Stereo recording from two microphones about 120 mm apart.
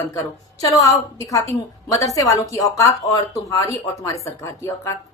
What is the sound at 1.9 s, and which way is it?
A woman's voice, 30° left (ahead or behind).